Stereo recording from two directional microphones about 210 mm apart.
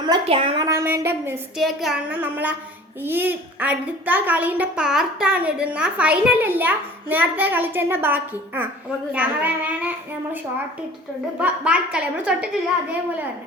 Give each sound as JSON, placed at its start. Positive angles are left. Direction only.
{"t": 0.0, "sound": "a child's voice", "side_deg": -25}
{"t": 1.5, "sound": "a child's voice", "side_deg": 0}
{"t": 11.3, "sound": "a woman's voice", "side_deg": -5}